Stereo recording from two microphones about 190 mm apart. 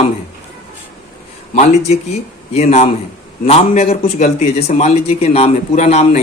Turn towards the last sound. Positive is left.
turn(degrees=35)  # may be behind; listen again after turning